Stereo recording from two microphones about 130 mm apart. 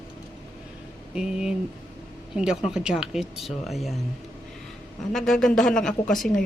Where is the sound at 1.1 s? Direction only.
5° right (ahead or behind).